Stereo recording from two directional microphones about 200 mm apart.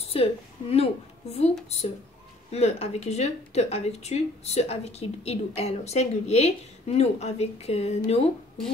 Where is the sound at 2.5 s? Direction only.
30° left (ahead or behind).